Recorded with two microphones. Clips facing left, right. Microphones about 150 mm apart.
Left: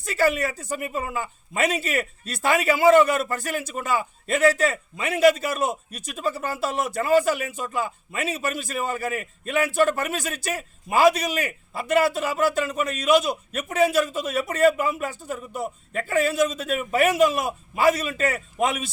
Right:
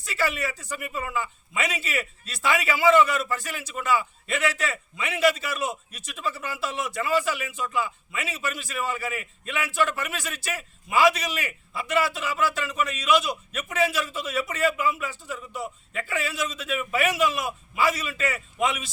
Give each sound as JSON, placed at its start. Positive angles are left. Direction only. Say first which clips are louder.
{"t": 0.0, "sound": "a man's voice", "louder": "left 6 dB", "side_deg": 50}